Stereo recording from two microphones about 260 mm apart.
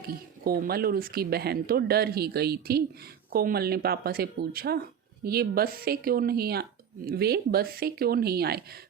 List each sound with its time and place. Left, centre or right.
0.1 s speech: right